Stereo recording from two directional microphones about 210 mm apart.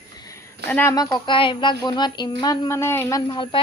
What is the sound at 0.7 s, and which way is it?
A woman's voice, 10° left (ahead or behind).